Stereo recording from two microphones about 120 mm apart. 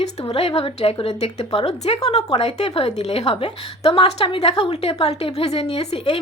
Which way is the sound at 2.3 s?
55° left (ahead or behind).